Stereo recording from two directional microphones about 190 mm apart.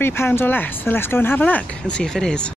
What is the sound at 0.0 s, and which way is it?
Speech, 10° left (ahead or behind).